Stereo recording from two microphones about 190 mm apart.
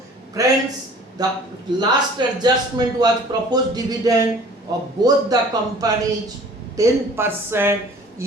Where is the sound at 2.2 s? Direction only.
25° right (ahead or behind).